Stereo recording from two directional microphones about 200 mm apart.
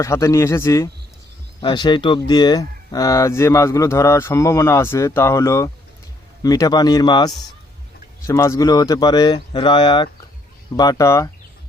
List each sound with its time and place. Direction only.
0.0 s speech: 15° left (ahead or behind)